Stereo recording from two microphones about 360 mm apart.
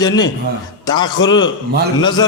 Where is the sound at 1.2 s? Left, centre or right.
Left.